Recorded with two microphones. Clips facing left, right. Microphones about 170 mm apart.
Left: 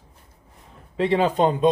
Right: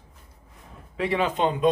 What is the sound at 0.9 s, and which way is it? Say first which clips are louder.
Speech: left 5 dB; 30° left (ahead or behind).